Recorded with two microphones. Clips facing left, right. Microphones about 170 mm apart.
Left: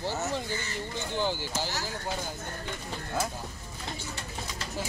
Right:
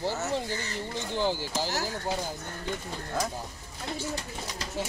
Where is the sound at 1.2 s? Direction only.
35° right (ahead or behind).